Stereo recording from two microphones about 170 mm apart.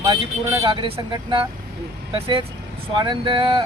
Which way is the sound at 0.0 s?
20° right (ahead or behind).